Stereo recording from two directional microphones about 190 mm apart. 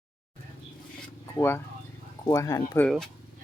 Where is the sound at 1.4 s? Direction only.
10° left (ahead or behind).